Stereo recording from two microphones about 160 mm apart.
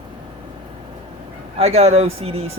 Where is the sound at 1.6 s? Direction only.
40° right (ahead or behind).